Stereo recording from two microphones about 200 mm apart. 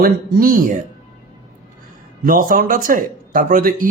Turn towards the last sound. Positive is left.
turn(degrees=-45)  # may be behind; listen again after turning